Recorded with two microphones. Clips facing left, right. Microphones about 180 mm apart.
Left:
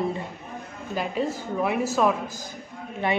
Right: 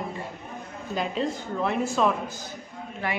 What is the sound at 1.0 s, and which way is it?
Speech, 5° left (ahead or behind).